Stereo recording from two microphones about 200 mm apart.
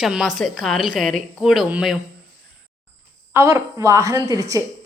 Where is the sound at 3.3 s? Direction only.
15° right (ahead or behind).